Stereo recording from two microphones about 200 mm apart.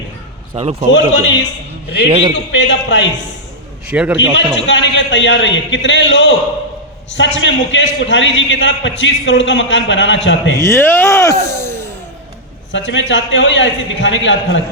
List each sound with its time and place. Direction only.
0.5 s a man's voice: 30° right (ahead or behind)
0.9 s a man's voice: 65° left (ahead or behind)
2.0 s a man's voice: 25° right (ahead or behind)
2.3 s a man's voice: 60° left (ahead or behind)
3.8 s a man's voice: 5° right (ahead or behind)
4.2 s a man's voice: 65° left (ahead or behind)
10.6 s speech: 15° left (ahead or behind)
11.4 s a sound: 15° left (ahead or behind)
12.7 s a man's voice: 65° left (ahead or behind)